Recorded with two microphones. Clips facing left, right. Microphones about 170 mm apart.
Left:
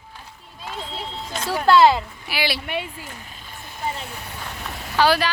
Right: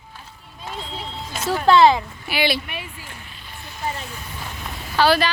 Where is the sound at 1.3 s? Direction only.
5° right (ahead or behind).